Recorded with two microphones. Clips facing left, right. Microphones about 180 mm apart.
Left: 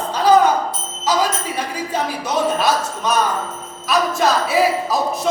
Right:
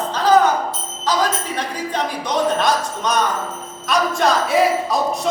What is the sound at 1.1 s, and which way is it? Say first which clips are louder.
Speech: left 1 dB; 10° left (ahead or behind).